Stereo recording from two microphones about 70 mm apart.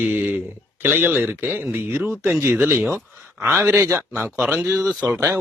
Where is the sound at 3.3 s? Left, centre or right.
Centre.